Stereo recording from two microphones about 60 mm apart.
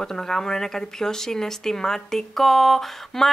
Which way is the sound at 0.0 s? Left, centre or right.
Centre.